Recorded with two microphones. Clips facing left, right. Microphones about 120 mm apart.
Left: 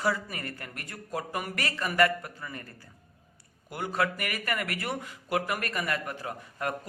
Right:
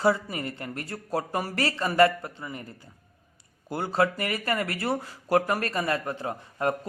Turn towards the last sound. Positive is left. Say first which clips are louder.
# right 6 dB
turn(degrees=-25)  # may be behind; listen again after turning